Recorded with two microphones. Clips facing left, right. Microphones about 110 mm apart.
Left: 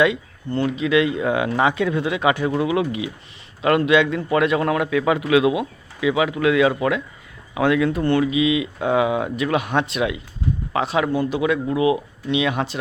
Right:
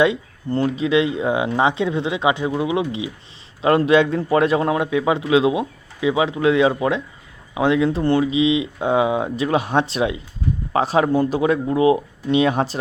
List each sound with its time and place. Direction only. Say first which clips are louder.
0.0 s a man's voice: right 1 dB; 30° right (ahead or behind)